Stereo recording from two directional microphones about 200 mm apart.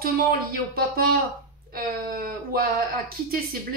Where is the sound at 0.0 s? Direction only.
45° right (ahead or behind).